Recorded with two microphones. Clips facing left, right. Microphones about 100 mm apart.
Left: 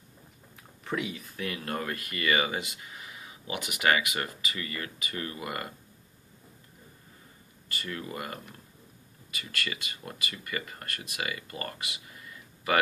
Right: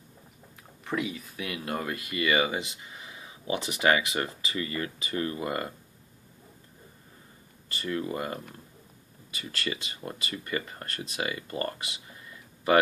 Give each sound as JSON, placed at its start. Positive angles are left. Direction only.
{"t": 0.8, "sound": "speech", "side_deg": 0}
{"t": 7.7, "sound": "speech", "side_deg": -25}